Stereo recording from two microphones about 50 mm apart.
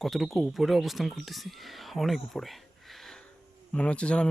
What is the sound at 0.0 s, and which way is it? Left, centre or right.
Speech, centre.